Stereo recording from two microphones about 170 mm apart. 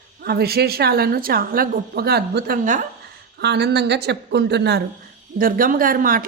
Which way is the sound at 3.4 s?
80° right.